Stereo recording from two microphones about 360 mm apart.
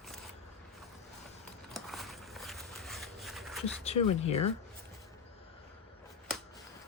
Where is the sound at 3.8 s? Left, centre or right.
Centre.